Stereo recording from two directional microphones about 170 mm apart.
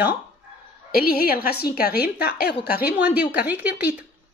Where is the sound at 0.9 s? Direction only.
60° left (ahead or behind).